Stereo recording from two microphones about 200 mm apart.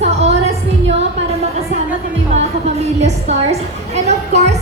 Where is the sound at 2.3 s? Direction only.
35° right (ahead or behind).